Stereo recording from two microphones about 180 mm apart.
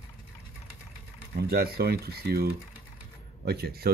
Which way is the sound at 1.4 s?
60° right (ahead or behind).